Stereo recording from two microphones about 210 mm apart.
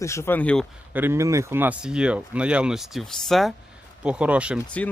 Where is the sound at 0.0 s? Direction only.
15° left (ahead or behind).